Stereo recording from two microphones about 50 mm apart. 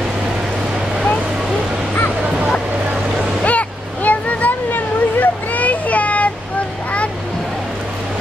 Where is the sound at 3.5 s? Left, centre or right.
Left.